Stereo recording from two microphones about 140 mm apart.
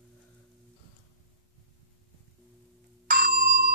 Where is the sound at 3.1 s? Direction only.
90° right.